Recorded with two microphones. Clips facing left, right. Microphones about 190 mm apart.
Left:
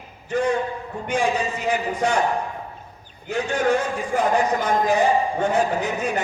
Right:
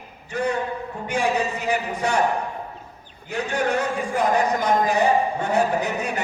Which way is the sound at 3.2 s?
60° right (ahead or behind).